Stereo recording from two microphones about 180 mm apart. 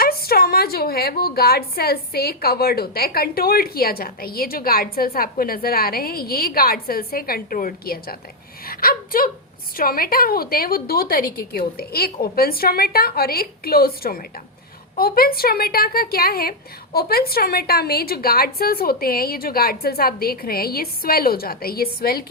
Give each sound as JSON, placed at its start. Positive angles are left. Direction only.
{"t": 0.0, "sound": "a woman's voice", "side_deg": 60}